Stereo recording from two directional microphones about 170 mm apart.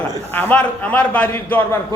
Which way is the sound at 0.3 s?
10° left (ahead or behind).